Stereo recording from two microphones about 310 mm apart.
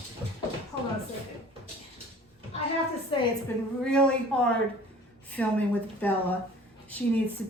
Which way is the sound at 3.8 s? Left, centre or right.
Centre.